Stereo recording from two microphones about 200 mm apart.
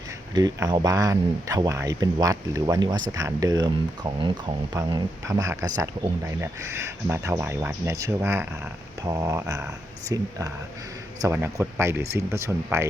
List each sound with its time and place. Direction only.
0.3 s speech: 20° right (ahead or behind)